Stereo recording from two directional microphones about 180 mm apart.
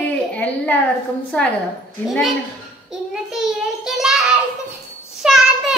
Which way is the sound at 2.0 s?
Centre (ahead or behind).